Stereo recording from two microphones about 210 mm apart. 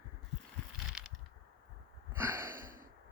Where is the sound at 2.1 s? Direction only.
10° right (ahead or behind).